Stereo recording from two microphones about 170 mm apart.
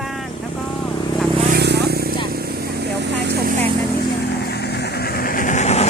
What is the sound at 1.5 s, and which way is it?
Vehicle, 75° right (ahead or behind).